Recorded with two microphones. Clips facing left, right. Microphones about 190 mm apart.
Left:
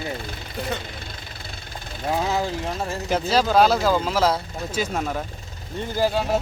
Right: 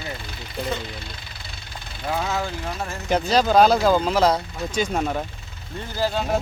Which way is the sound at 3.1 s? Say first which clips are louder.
Right 2 dB; 5° left (ahead or behind).